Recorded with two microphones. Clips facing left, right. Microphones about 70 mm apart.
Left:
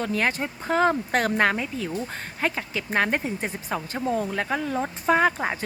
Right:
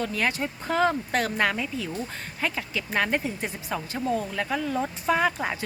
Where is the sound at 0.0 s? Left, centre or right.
Left.